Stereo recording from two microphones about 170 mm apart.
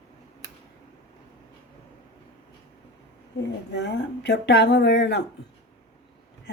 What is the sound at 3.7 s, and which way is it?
Speech, 90° left.